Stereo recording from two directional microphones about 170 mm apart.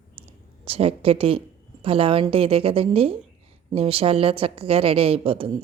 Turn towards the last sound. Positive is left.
turn(degrees=-35)  # may be behind; listen again after turning